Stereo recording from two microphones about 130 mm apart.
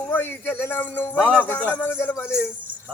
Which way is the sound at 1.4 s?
15° left (ahead or behind).